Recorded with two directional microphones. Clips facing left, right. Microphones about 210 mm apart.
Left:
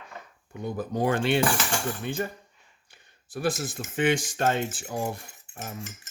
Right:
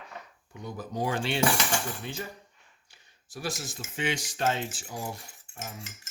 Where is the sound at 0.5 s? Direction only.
55° left (ahead or behind).